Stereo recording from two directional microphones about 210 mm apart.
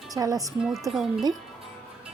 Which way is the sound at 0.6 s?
Centre (ahead or behind).